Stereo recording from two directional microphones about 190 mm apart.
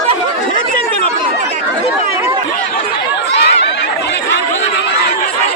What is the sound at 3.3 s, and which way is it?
Chatter, 60° left (ahead or behind).